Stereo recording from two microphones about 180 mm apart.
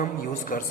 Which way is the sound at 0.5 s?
45° left (ahead or behind).